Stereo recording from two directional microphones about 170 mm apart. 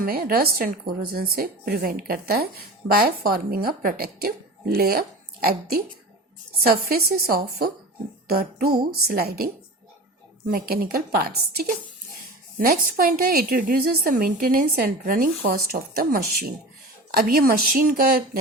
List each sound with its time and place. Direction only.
0.0 s a woman's voice: 60° right (ahead or behind)
10.5 s speech: 60° right (ahead or behind)